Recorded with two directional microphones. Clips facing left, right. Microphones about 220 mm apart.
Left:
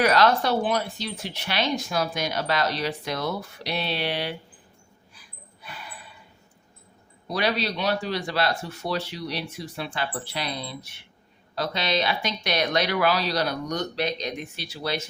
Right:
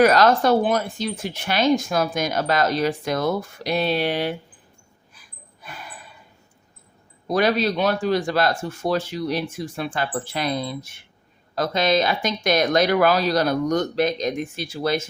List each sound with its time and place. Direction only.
0.0 s speech: 45° right (ahead or behind)
5.1 s a sound: 45° right (ahead or behind)
7.3 s speech: 50° right (ahead or behind)